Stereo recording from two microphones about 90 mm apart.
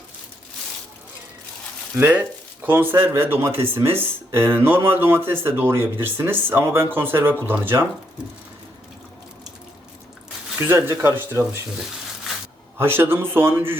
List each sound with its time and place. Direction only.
2.6 s speech: 25° right (ahead or behind)
10.8 s speech: 30° right (ahead or behind)
12.8 s speech: 25° right (ahead or behind)